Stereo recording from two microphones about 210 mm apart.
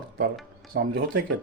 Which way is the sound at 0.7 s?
50° right (ahead or behind).